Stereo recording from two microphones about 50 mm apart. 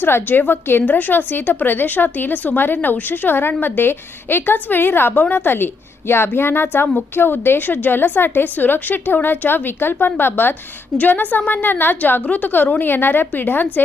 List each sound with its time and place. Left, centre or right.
0.0 s a woman's voice: left
10.9 s a woman's voice: left
12.2 s a woman's voice: left